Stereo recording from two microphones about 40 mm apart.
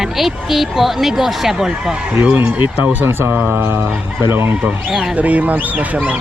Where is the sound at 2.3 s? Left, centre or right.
Right.